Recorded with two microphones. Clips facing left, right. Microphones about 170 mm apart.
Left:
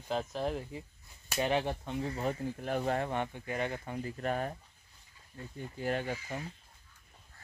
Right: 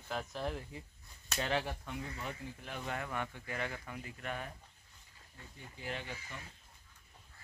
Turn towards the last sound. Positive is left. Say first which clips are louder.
# left 9 dB
turn(degrees=50)  # may be behind; listen again after turning